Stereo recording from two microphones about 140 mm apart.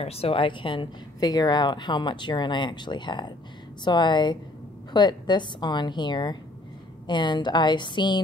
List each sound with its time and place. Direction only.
0.0 s speech: 45° left (ahead or behind)